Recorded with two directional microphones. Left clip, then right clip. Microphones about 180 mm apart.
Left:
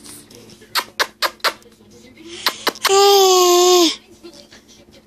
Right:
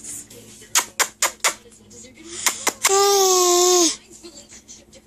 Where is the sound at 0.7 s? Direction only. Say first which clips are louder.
Left 1 dB; 10° right (ahead or behind).